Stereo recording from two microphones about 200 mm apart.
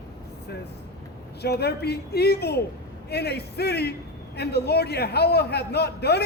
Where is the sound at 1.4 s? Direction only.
55° left (ahead or behind).